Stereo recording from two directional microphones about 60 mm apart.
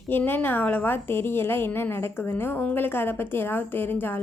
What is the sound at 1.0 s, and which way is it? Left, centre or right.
A woman's voice, left.